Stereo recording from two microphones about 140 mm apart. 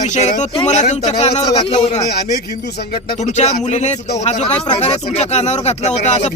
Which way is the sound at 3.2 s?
55° left (ahead or behind).